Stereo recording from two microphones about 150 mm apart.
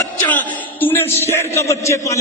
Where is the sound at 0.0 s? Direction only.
20° left (ahead or behind).